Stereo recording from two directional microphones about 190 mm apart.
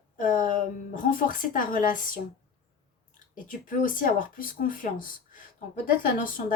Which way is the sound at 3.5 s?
45° left (ahead or behind).